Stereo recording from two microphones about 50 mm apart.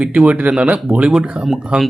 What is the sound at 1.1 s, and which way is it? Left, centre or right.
Speech, centre.